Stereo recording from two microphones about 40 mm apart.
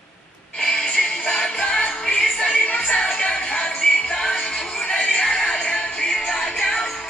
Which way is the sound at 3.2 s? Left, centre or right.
Left.